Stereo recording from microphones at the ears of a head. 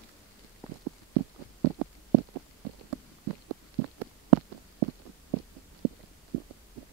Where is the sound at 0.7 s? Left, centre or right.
Right.